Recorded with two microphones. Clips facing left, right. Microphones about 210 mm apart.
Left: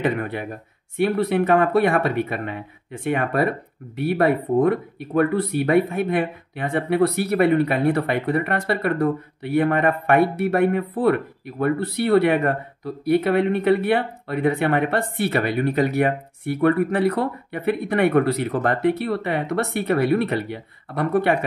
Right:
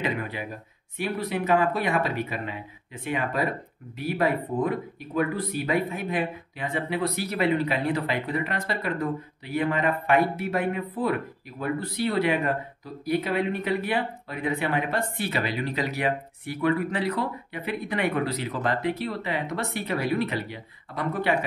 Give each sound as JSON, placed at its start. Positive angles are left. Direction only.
{"t": 0.0, "sound": "speech", "side_deg": 60}